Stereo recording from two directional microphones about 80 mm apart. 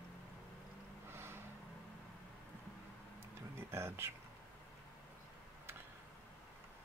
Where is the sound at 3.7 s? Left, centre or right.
Right.